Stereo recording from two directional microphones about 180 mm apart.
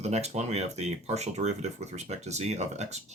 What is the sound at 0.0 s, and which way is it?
Speech, 35° right (ahead or behind).